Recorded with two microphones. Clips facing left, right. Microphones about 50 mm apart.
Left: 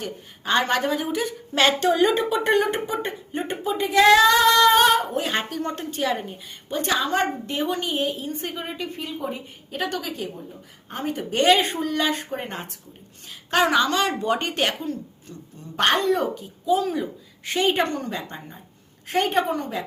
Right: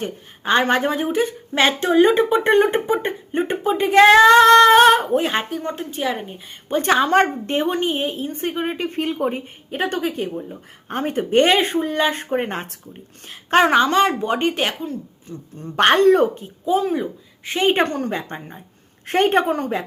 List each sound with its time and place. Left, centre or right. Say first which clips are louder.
0.0 s a woman's voice: right 5 dB; right
5.4 s speech: right 2 dB; centre
6.7 s a woman's voice: right 7 dB; right
9.0 s speech: right 8 dB; right
9.6 s a woman's voice: right 5 dB; right; by 14.9 s centre
15.3 s a woman's voice: right 6 dB; right; by 17.6 s centre
17.6 s a woman's voice: right 4 dB; right
19.0 s a woman's voice: right 5 dB; right